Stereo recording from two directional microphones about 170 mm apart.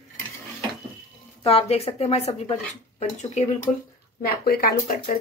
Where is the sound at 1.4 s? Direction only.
35° left (ahead or behind).